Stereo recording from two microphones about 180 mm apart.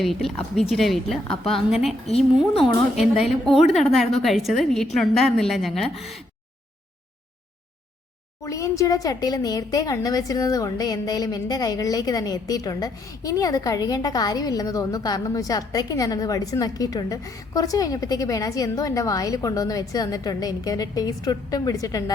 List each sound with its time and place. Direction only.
0.0 s a woman's voice: centre (ahead or behind)
2.0 s a woman's voice: 35° left (ahead or behind)
2.6 s a woman's voice: centre (ahead or behind)
8.4 s speech: 20° left (ahead or behind)